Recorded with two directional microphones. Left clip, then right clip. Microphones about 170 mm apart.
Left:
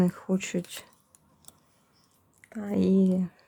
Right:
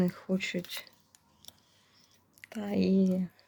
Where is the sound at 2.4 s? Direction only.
10° left (ahead or behind).